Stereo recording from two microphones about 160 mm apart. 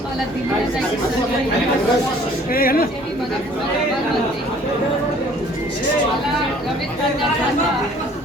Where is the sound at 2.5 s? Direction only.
65° left (ahead or behind).